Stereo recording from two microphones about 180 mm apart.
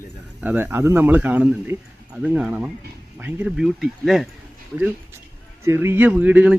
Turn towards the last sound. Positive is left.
turn(degrees=-10)  # may be behind; listen again after turning